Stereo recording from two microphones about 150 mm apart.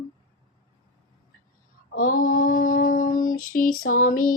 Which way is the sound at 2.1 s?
65° left (ahead or behind).